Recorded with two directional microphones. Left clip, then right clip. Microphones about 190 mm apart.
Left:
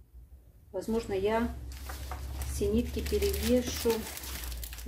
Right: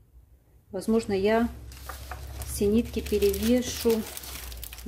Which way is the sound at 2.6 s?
60° right (ahead or behind).